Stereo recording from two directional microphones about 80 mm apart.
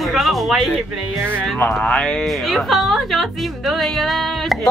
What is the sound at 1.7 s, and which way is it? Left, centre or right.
Speech, centre.